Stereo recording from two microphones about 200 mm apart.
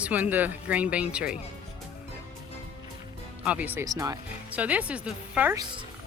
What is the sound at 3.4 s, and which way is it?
Speech, 10° right (ahead or behind).